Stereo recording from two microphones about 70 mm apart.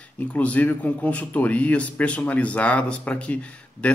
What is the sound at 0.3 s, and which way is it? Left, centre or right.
A man's voice, centre.